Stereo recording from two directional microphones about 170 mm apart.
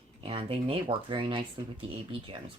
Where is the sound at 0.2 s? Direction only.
35° right (ahead or behind).